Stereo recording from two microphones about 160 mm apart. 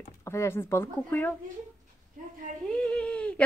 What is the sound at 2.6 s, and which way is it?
Speech, 5° left (ahead or behind).